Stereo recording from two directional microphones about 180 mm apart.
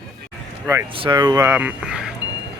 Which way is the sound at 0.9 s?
25° right (ahead or behind).